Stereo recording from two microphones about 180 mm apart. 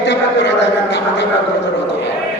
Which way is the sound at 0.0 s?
75° left (ahead or behind).